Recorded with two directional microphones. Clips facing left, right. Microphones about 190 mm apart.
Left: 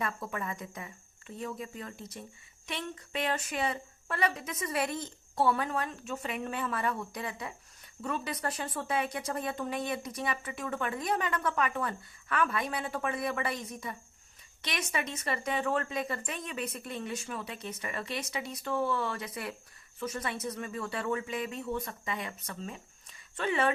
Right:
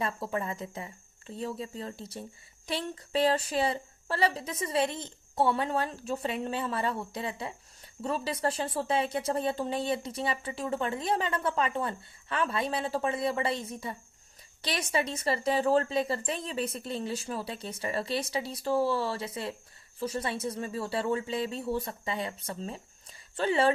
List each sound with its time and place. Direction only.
0.0 s a woman's voice: 30° right (ahead or behind)